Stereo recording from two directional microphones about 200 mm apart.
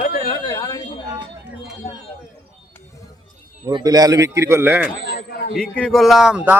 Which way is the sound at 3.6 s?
20° right (ahead or behind).